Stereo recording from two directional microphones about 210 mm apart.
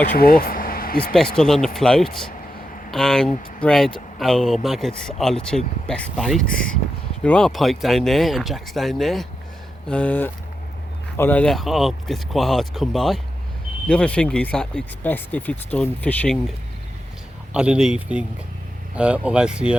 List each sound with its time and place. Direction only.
0.2 s speech: 45° left (ahead or behind)
1.4 s speech: centre (ahead or behind)
17.5 s speech: 5° right (ahead or behind)